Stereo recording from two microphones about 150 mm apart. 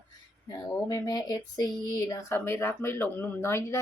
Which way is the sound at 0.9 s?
25° left (ahead or behind).